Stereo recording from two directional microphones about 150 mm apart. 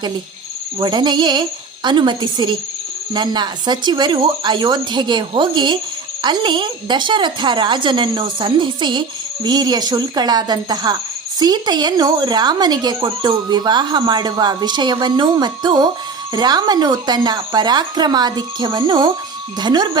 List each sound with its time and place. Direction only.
0.8 s a woman's voice: 30° right (ahead or behind)